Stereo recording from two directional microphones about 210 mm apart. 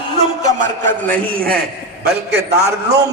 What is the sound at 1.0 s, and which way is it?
Music, 40° right (ahead or behind).